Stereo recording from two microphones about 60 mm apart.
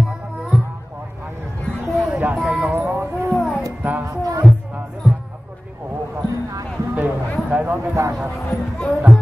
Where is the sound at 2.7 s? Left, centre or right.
Right.